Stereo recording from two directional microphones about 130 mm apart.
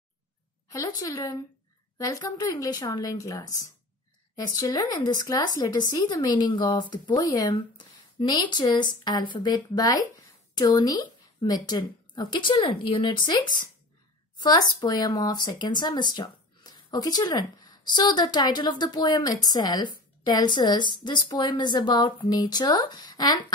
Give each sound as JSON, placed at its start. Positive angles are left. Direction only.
{"t": 0.7, "sound": "a woman's voice", "side_deg": 25}